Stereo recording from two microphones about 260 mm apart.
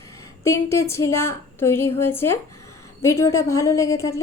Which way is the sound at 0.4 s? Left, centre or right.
Centre.